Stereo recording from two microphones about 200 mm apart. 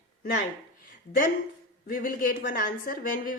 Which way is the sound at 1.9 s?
45° left (ahead or behind).